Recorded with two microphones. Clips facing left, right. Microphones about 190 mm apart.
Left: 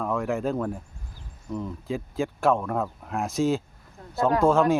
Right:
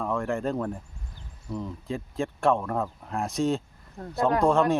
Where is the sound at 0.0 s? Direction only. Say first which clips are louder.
Left 1 dB; centre (ahead or behind).